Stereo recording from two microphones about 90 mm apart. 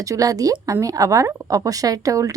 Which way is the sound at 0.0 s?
40° right (ahead or behind).